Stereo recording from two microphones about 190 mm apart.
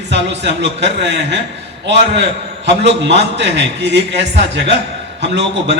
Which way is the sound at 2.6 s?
65° right (ahead or behind).